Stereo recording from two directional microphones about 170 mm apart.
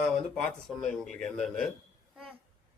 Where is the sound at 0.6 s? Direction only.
5° left (ahead or behind).